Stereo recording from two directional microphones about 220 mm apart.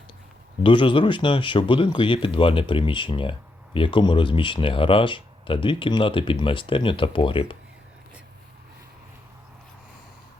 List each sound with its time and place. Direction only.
0.6 s speech: 20° left (ahead or behind)